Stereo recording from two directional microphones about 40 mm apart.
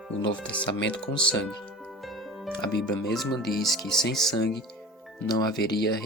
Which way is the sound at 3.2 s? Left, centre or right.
Centre.